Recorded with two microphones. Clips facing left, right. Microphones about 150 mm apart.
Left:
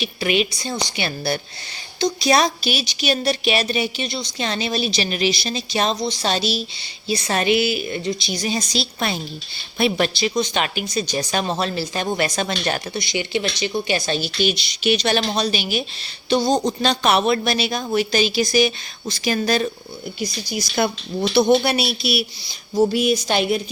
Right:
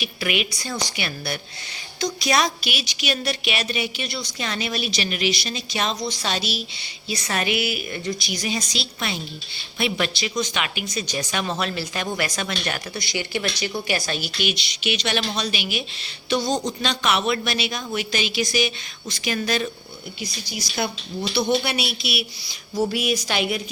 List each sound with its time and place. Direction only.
0.0 s a woman's voice: 30° left (ahead or behind)
22.7 s a woman's voice: 25° left (ahead or behind)